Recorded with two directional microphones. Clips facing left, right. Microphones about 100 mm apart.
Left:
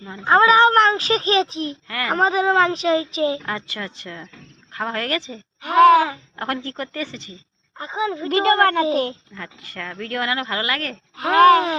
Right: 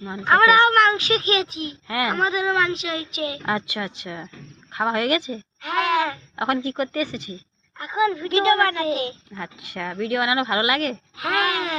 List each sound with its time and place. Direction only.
0.0 s speech: 20° right (ahead or behind)
0.3 s a child's voice: 25° left (ahead or behind)
1.9 s speech: 15° right (ahead or behind)
2.1 s a child's voice: 40° left (ahead or behind)
3.4 s speech: 15° right (ahead or behind)
5.6 s a sound: 35° left (ahead or behind)
6.3 s speech: 10° right (ahead or behind)
7.8 s a woman's voice: 25° left (ahead or behind)
8.3 s speech: 45° left (ahead or behind)
9.3 s speech: 15° right (ahead or behind)
11.2 s a child's voice: 30° left (ahead or behind)